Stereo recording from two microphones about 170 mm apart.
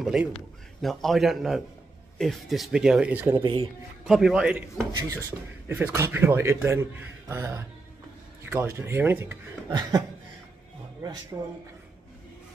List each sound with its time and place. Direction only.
0.0 s speech: 5° right (ahead or behind)
3.4 s speech: 35° right (ahead or behind)
4.1 s a man's voice: 5° right (ahead or behind); by 10.0 s 25° right (ahead or behind)
11.3 s speech: 20° right (ahead or behind)